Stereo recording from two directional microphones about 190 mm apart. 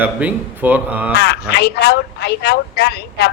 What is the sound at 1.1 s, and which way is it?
Speech, 60° left (ahead or behind).